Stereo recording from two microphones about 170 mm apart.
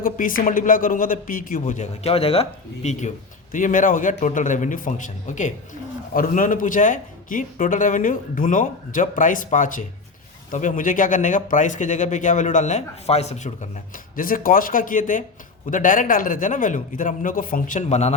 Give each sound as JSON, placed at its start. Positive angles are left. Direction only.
{"t": 0.0, "sound": "speech", "side_deg": 55}
{"t": 3.5, "sound": "speech", "side_deg": 50}